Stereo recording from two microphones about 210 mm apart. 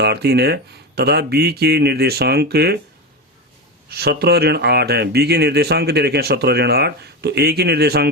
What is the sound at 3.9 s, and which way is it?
Speech, 50° right (ahead or behind).